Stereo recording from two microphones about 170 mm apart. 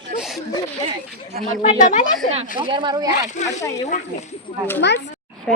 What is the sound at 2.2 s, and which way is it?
Speech, 40° left (ahead or behind).